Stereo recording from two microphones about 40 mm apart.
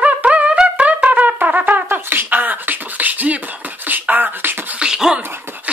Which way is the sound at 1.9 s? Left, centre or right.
Right.